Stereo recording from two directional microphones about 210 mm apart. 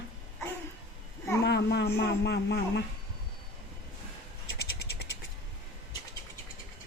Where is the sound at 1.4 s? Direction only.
50° left (ahead or behind).